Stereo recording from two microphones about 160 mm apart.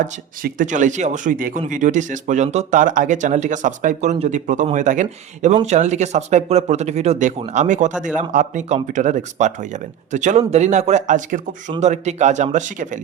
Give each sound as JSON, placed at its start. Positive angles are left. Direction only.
{"t": 0.0, "sound": "speech", "side_deg": -50}